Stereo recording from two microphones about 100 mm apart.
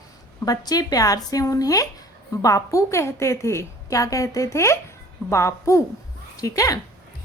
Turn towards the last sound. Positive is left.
turn(degrees=35)  # may be behind; listen again after turning